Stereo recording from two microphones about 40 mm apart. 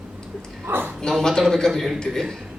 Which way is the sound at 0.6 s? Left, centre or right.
Right.